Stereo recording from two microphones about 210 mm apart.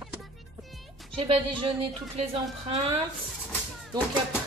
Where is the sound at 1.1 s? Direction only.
25° right (ahead or behind).